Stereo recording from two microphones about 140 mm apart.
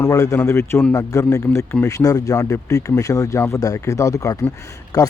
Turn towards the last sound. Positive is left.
turn(degrees=25)  # may be behind; listen again after turning